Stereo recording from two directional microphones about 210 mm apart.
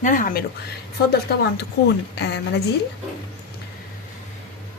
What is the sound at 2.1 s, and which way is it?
Speech, 55° left (ahead or behind).